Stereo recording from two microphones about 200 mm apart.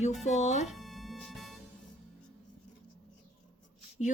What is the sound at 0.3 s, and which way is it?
Speech, 35° left (ahead or behind).